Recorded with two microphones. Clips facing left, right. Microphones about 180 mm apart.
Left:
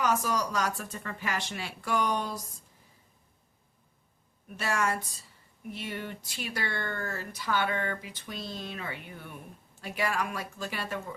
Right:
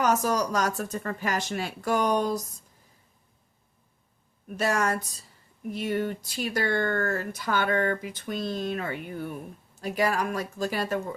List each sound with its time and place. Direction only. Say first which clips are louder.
0.0 s speech: right 4 dB; 40° right (ahead or behind)
4.4 s speech: right 4 dB; 40° right (ahead or behind)